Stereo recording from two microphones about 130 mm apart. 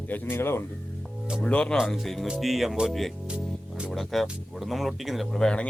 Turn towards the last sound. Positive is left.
turn(degrees=5)  # may be behind; listen again after turning